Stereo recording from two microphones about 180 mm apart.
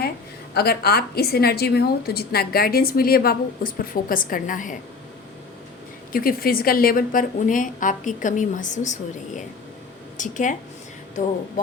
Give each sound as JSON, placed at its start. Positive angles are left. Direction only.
{"t": 0.5, "sound": "a woman's voice", "side_deg": 60}
{"t": 6.1, "sound": "a woman's voice", "side_deg": 55}
{"t": 10.2, "sound": "a woman's voice", "side_deg": 45}